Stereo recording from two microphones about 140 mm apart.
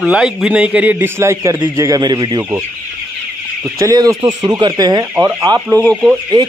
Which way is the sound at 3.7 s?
25° right (ahead or behind).